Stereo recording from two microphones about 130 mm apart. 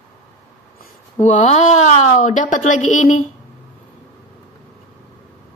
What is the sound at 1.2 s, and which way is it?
A woman's voice, 65° left (ahead or behind).